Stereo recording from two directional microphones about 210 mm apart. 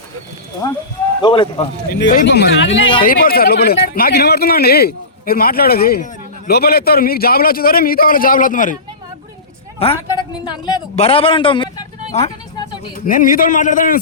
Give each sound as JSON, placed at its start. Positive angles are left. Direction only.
{"t": 1.2, "sound": "speech", "side_deg": 25}
{"t": 1.9, "sound": "speech", "side_deg": 55}
{"t": 3.1, "sound": "a man's voice", "side_deg": 45}
{"t": 9.7, "sound": "a man's voice", "side_deg": 25}
{"t": 13.1, "sound": "a man's voice", "side_deg": 40}